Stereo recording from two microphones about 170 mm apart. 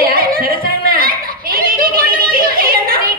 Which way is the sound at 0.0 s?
60° right (ahead or behind).